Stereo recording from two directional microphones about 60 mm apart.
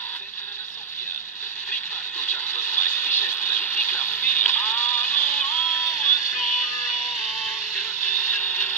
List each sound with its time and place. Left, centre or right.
2.1 s radio: left; by 5.9 s centre
5.9 s music: centre
8.2 s a sound: left